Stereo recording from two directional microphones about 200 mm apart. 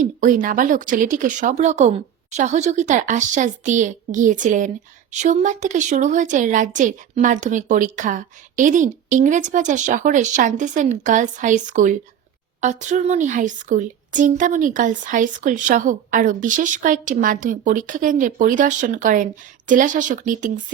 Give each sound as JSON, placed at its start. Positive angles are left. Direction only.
{"t": 0.0, "sound": "speech", "side_deg": -40}